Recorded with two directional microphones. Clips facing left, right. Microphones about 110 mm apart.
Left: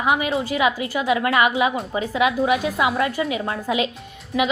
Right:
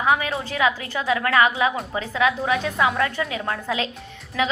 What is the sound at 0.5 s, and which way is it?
A woman's voice, 15° left (ahead or behind).